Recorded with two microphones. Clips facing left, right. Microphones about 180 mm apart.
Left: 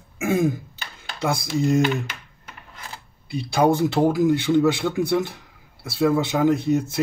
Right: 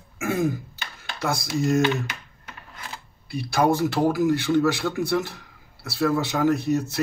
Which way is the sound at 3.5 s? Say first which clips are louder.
Left 2 dB; 15° left (ahead or behind).